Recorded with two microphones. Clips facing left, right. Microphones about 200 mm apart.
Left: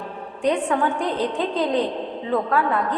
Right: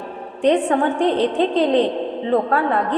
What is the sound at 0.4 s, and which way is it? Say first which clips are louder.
A woman's voice: right 4 dB; 30° right (ahead or behind).